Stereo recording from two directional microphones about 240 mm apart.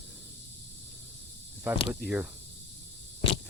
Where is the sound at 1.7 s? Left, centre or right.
Centre.